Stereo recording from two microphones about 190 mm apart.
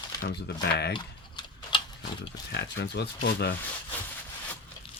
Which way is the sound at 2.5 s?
65° left (ahead or behind).